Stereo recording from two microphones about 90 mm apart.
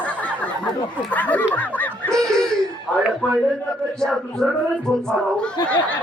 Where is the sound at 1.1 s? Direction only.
15° left (ahead or behind).